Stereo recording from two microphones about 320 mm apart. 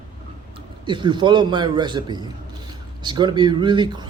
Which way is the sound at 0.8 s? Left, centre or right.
Centre.